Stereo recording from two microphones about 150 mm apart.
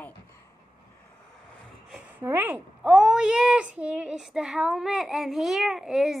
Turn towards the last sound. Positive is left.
turn(degrees=0)  # may be behind; listen again after turning